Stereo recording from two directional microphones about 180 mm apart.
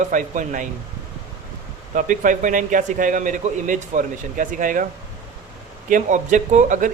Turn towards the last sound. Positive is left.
turn(degrees=-45)  # may be behind; listen again after turning